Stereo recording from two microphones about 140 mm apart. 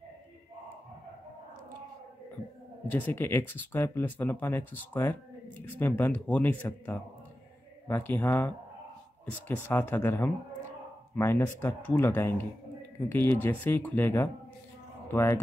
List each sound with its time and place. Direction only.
2.9 s speech: 15° left (ahead or behind)
9.7 s speech: 15° left (ahead or behind)